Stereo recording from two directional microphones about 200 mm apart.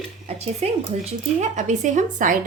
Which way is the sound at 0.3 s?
30° right (ahead or behind).